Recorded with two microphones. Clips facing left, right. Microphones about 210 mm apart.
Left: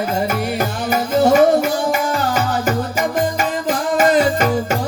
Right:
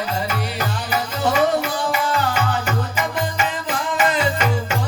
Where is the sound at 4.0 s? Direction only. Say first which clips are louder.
Left 6 dB; 40° left (ahead or behind).